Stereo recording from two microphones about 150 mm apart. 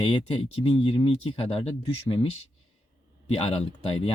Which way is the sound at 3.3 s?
40° left (ahead or behind).